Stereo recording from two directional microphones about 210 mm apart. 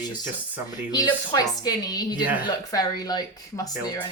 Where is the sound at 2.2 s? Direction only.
5° right (ahead or behind).